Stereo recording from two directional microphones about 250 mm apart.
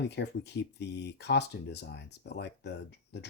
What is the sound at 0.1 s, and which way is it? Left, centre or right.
Speech, left.